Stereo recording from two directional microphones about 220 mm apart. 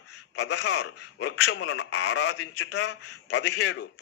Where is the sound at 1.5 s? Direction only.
60° left (ahead or behind).